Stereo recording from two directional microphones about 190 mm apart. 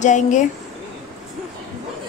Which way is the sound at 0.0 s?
40° left (ahead or behind).